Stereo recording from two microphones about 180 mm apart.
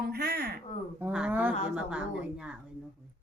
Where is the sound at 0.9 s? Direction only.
10° right (ahead or behind).